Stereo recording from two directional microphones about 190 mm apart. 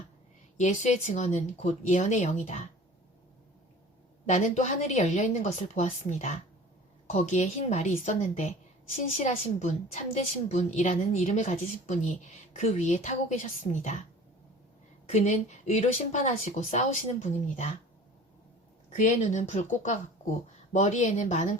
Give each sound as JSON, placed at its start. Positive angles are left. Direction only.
{"t": 0.5, "sound": "a woman's voice", "side_deg": 40}
{"t": 4.3, "sound": "a woman's voice", "side_deg": 35}
{"t": 15.1, "sound": "a woman's voice", "side_deg": 35}
{"t": 18.9, "sound": "a woman's voice", "side_deg": 40}